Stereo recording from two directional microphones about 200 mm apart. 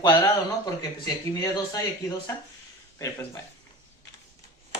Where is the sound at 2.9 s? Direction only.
15° left (ahead or behind).